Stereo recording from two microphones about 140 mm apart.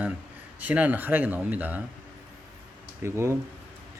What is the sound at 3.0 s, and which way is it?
Speech, 20° right (ahead or behind).